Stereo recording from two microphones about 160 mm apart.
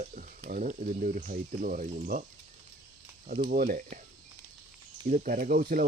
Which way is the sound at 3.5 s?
60° right (ahead or behind).